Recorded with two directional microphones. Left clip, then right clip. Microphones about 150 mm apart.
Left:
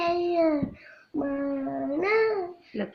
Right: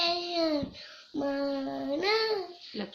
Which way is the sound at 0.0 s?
20° right (ahead or behind).